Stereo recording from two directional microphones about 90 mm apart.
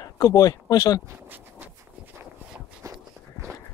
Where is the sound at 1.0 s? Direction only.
25° right (ahead or behind).